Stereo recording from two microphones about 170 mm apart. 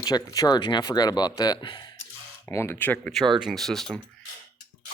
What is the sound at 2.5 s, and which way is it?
Speech, 15° left (ahead or behind).